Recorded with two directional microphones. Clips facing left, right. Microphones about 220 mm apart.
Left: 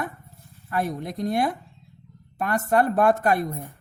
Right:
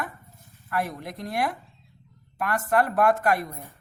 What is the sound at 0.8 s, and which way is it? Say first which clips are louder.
Speech: left 5 dB; 25° left (ahead or behind).